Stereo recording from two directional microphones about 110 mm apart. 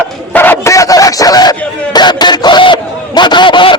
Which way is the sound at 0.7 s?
30° left (ahead or behind).